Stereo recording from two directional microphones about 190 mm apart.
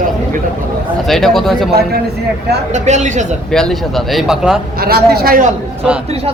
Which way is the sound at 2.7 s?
40° right (ahead or behind).